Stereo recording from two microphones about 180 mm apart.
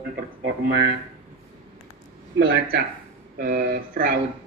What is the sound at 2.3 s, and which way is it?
Speech, 60° right (ahead or behind).